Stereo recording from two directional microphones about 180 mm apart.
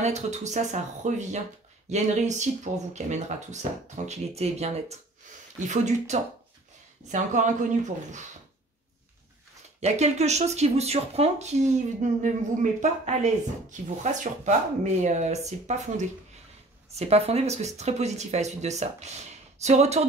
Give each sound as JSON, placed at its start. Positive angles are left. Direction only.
{"t": 0.0, "sound": "speech", "side_deg": -40}
{"t": 9.8, "sound": "speech", "side_deg": -40}